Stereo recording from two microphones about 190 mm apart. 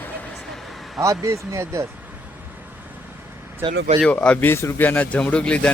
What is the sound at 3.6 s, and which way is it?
Speech, 20° right (ahead or behind).